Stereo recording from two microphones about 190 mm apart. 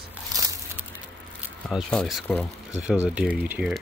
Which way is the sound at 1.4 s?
Centre (ahead or behind).